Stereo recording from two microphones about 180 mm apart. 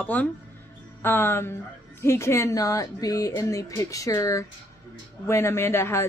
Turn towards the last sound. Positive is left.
turn(degrees=15)  # may be behind; listen again after turning